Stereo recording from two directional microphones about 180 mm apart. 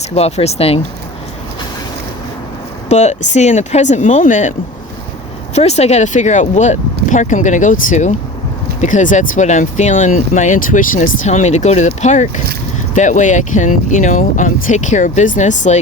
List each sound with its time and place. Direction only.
0.1 s speech: 35° left (ahead or behind)
2.9 s speech: 40° left (ahead or behind)
5.5 s speech: 35° left (ahead or behind)